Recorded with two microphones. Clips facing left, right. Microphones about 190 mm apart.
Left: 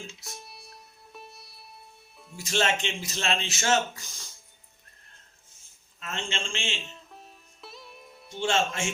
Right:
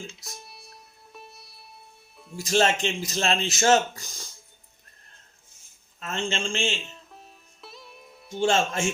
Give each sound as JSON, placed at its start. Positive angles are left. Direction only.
{"t": 0.3, "sound": "music", "side_deg": 0}
{"t": 2.4, "sound": "speech", "side_deg": -40}
{"t": 6.0, "sound": "speech", "side_deg": -40}
{"t": 6.8, "sound": "music", "side_deg": 0}
{"t": 8.4, "sound": "speech", "side_deg": -40}